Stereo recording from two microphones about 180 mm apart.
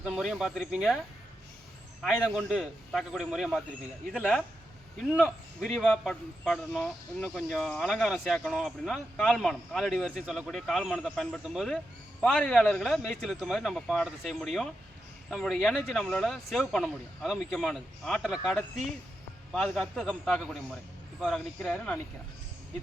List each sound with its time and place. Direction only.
0.0 s speech: centre (ahead or behind)
19.5 s speech: centre (ahead or behind)